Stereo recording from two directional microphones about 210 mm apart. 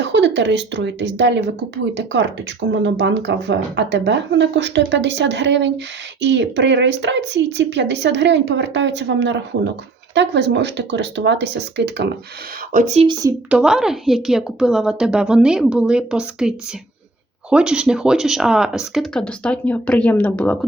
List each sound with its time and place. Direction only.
0.0 s speech: 60° right (ahead or behind)
12.7 s speech: 35° right (ahead or behind)
13.5 s speech: 5° right (ahead or behind)